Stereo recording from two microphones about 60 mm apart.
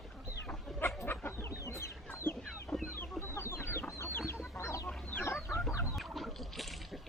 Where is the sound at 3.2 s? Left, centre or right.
Left.